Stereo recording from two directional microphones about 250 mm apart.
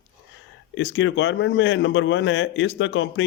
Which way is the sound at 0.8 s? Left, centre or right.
Left.